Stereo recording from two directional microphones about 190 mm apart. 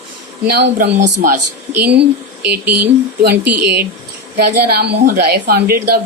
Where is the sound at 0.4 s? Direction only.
55° right (ahead or behind).